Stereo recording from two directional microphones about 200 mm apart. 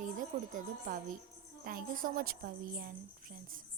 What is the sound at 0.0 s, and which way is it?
Music, 40° right (ahead or behind).